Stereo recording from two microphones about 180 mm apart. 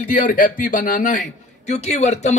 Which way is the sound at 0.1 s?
50° left (ahead or behind).